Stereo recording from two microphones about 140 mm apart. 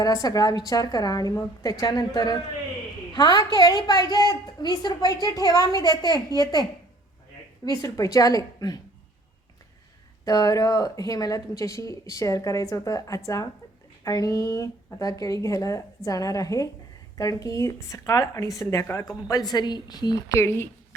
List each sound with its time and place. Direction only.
0.0 s speech: 25° left (ahead or behind)
10.2 s speech: 25° left (ahead or behind)